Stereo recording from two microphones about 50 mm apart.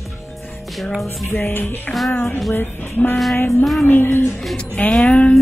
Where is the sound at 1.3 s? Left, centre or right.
Left.